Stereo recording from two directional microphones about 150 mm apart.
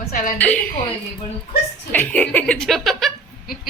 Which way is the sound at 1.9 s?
10° left (ahead or behind).